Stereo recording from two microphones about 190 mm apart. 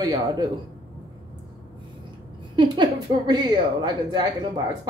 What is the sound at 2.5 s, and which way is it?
Speech, 25° right (ahead or behind).